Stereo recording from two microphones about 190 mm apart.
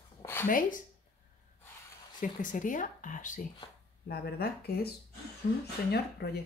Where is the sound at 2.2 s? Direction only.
45° left (ahead or behind).